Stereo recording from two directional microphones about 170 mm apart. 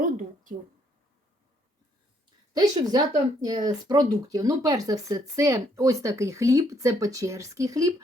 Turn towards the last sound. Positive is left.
turn(degrees=-20)  # may be behind; listen again after turning